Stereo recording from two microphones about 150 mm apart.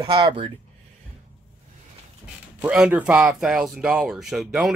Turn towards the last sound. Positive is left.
turn(degrees=0)  # may be behind; listen again after turning